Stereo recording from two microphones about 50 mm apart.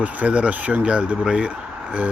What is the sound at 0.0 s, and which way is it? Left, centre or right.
Speech, right.